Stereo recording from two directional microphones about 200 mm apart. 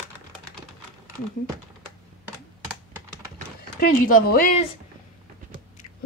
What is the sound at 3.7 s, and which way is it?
Speech, 45° left (ahead or behind).